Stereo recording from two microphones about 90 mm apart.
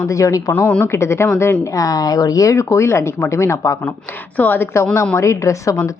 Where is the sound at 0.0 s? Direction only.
35° left (ahead or behind).